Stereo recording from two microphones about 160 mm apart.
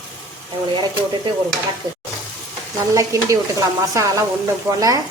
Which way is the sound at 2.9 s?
20° right (ahead or behind).